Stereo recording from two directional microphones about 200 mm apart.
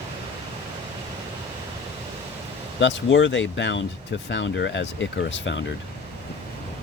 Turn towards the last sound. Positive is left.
turn(degrees=65)  # may be behind; listen again after turning